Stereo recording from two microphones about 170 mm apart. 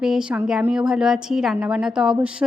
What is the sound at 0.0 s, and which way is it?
A woman's voice, 5° right (ahead or behind).